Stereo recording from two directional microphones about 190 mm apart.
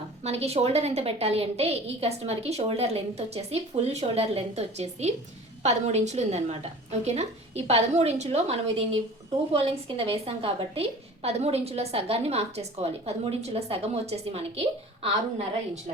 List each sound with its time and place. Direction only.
0.2 s a woman's voice: 35° right (ahead or behind)
10.0 s a woman's voice: 30° right (ahead or behind)